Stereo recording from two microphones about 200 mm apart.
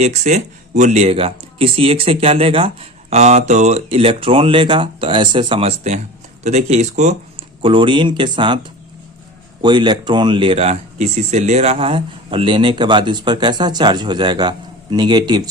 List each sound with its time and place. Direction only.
0.0 s speech: 35° right (ahead or behind)